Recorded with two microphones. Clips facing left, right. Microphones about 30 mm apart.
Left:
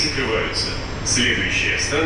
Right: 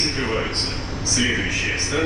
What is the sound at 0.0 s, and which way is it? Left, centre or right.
A man's voice, centre.